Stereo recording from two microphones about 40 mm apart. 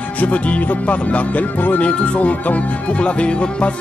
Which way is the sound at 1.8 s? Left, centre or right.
Left.